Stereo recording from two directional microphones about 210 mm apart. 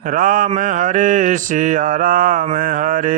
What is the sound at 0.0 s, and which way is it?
Mantra, 40° right (ahead or behind).